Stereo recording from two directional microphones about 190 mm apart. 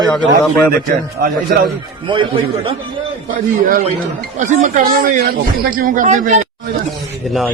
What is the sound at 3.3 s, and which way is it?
Speech, 45° right (ahead or behind).